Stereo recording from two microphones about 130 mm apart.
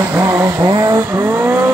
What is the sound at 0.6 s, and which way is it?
Vehicle, 30° right (ahead or behind).